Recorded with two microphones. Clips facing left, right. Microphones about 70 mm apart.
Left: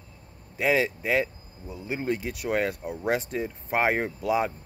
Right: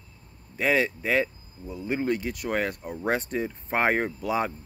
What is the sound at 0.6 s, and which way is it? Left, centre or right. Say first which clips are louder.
Speech: even; centre.